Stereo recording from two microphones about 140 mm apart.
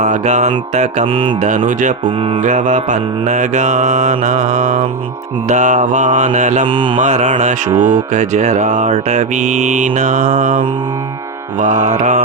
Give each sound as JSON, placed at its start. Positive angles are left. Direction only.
{"t": 0.0, "sound": "mantra", "side_deg": -55}
{"t": 1.0, "sound": "mantra", "side_deg": -40}
{"t": 1.5, "sound": "cattle", "side_deg": -65}
{"t": 2.4, "sound": "mantra", "side_deg": -55}
{"t": 5.5, "sound": "mantra", "side_deg": -60}
{"t": 6.7, "sound": "mantra", "side_deg": -35}
{"t": 7.0, "sound": "mantra", "side_deg": -60}
{"t": 11.6, "sound": "mantra", "side_deg": -60}